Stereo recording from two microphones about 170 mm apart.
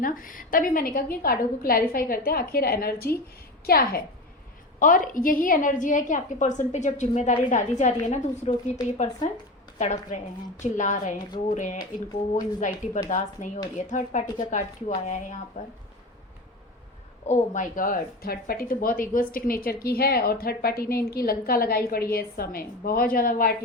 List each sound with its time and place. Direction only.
0.0 s a woman's voice: 55° left (ahead or behind)
17.2 s a woman's voice: 45° left (ahead or behind)